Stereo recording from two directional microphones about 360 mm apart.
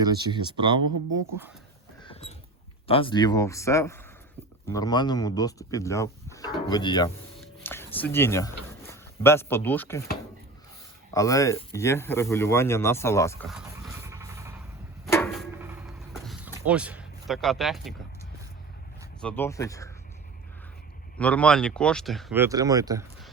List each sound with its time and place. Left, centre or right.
0.0 s speech: centre
2.2 s a sound: centre
2.8 s speech: centre
7.3 s music: centre
8.9 s speech: centre
11.1 s speech: centre
15.0 s a sound: centre
19.2 s speech: centre
21.2 s speech: centre